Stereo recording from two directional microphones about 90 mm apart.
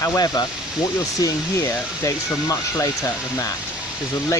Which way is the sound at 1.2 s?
35° left (ahead or behind).